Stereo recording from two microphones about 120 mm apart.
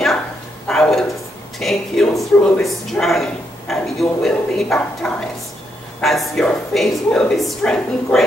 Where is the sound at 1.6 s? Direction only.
Centre (ahead or behind).